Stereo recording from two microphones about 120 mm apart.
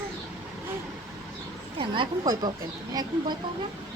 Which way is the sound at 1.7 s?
45° right (ahead or behind).